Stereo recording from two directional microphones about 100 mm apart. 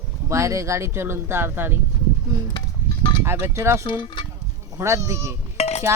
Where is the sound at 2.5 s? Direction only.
50° left (ahead or behind).